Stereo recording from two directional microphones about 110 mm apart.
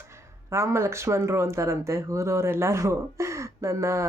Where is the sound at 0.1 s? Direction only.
25° right (ahead or behind).